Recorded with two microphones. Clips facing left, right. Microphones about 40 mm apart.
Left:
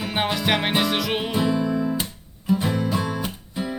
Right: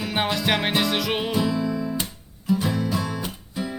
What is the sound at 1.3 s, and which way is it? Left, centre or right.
Music, centre.